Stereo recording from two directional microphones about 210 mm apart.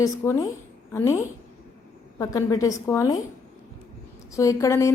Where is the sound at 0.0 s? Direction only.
15° left (ahead or behind).